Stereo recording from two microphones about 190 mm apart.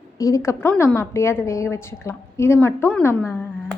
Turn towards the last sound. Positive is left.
turn(degrees=15)  # may be behind; listen again after turning